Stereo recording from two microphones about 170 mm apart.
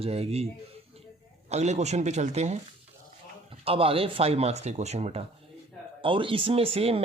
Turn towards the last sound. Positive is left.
turn(degrees=-35)  # may be behind; listen again after turning